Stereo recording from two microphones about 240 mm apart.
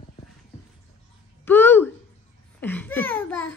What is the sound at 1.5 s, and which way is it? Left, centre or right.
A woman's voice, centre.